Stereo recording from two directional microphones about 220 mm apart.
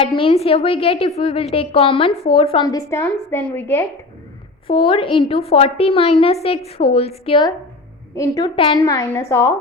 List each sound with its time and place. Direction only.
0.2 s a woman's voice: 25° left (ahead or behind); by 3.8 s 10° left (ahead or behind)
4.6 s a woman's voice: 25° left (ahead or behind)